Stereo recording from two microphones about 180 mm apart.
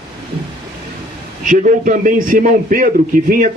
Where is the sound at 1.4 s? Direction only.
45° right (ahead or behind).